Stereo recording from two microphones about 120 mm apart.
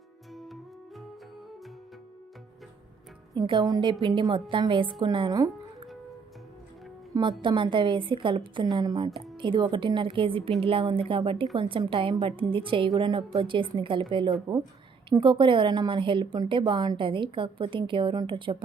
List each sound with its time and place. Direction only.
0.3 s music: centre (ahead or behind)
3.3 s a woman's voice: 35° right (ahead or behind)
7.4 s a woman's voice: 45° right (ahead or behind)